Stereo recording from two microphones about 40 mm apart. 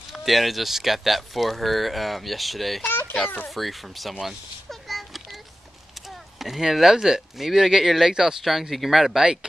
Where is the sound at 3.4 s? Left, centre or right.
Centre.